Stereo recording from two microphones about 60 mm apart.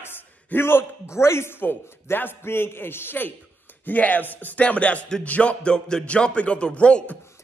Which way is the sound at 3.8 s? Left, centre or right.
Left.